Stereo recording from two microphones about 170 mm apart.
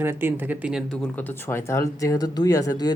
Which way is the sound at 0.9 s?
10° left (ahead or behind).